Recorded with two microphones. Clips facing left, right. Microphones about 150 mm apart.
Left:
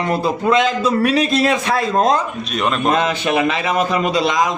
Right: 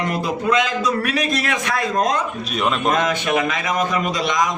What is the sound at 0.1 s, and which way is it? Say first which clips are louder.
A man's voice: left 6 dB; 30° left (ahead or behind).